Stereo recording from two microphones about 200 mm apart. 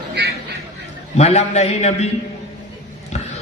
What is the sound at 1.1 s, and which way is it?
Speech, 30° left (ahead or behind).